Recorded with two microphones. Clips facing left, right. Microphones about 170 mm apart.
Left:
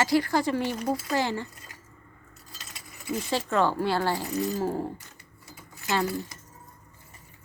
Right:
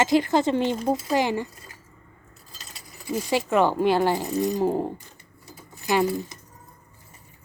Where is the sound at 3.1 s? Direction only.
15° right (ahead or behind).